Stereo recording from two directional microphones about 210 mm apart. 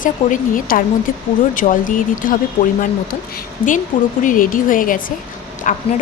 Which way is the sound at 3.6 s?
40° left (ahead or behind).